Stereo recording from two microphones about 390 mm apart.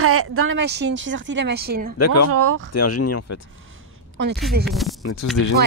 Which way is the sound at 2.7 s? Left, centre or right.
Left.